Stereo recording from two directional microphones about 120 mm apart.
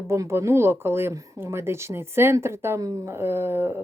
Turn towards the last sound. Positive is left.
turn(degrees=-20)  # may be behind; listen again after turning